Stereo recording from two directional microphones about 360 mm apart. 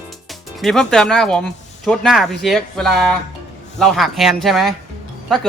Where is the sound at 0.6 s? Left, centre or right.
Centre.